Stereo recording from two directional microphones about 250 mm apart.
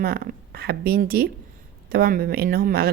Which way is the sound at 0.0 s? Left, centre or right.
Right.